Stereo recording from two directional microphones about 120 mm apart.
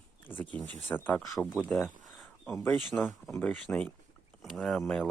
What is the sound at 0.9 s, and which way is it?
Speech, 15° left (ahead or behind).